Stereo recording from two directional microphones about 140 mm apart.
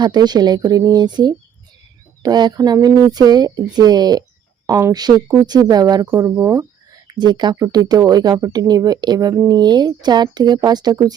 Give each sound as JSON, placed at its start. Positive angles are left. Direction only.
{"t": 0.0, "sound": "speech", "side_deg": -30}